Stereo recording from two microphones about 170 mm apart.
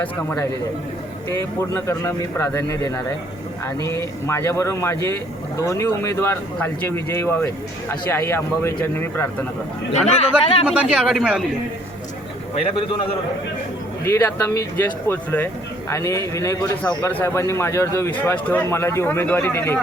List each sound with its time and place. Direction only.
0.0 s speech: 10° left (ahead or behind)
9.9 s a man's voice: 40° left (ahead or behind)
10.7 s speech: 5° right (ahead or behind)
12.8 s a man's voice: 30° left (ahead or behind)
14.0 s speech: 15° left (ahead or behind)